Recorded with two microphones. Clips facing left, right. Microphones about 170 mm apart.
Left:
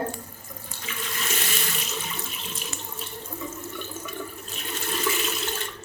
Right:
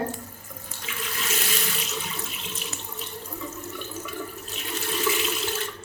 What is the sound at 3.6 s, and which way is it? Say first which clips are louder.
Water: even; 5° right (ahead or behind).